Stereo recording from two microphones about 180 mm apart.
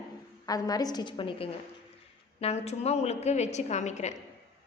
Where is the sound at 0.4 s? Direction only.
20° left (ahead or behind).